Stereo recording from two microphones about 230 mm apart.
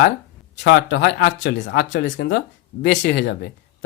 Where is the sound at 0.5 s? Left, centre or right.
Left.